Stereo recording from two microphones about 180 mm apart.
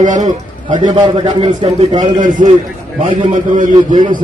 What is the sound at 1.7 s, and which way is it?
Speech, 25° right (ahead or behind).